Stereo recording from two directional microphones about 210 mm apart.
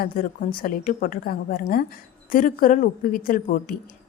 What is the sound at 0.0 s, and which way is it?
A woman's voice, 45° left (ahead or behind).